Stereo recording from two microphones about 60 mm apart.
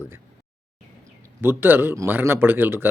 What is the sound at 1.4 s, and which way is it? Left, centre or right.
Speech, right.